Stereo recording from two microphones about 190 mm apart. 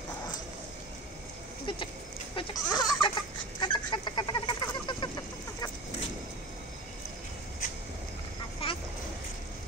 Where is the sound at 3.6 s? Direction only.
25° left (ahead or behind).